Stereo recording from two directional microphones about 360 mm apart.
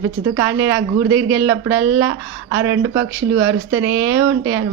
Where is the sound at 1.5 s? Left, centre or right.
Centre.